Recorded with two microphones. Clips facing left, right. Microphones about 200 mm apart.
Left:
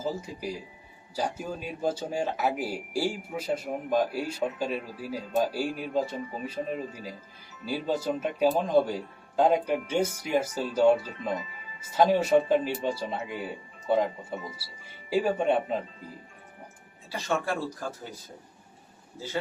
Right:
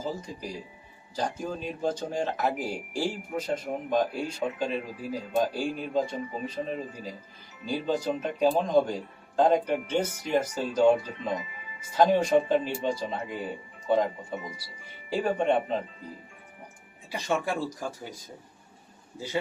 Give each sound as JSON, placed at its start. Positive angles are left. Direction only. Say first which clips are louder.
{"t": 0.0, "sound": "speech", "louder": "left 2 dB", "side_deg": 10}
{"t": 17.1, "sound": "speech", "louder": "right 1 dB", "side_deg": -15}